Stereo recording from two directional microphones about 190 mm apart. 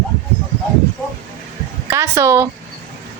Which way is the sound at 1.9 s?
15° right (ahead or behind).